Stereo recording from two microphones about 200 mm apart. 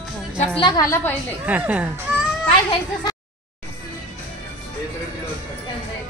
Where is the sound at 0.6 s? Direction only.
15° left (ahead or behind).